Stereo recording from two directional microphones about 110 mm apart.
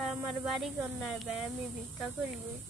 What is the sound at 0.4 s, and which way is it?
Speech, 5° right (ahead or behind).